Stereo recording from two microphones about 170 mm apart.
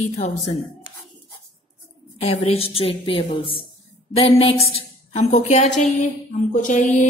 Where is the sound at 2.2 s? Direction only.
35° left (ahead or behind).